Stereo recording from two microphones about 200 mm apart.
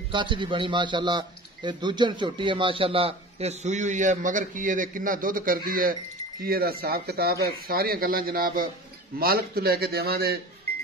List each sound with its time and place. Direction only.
0.1 s a man's voice: 25° right (ahead or behind); by 10.4 s 50° right (ahead or behind)